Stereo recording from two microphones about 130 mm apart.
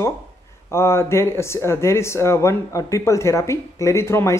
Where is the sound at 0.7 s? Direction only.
20° left (ahead or behind).